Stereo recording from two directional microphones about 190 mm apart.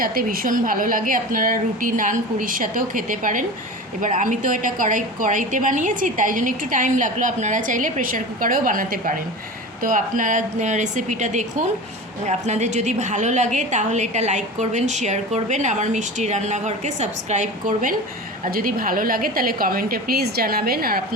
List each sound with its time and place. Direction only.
0.0 s a woman's voice: 50° right (ahead or behind)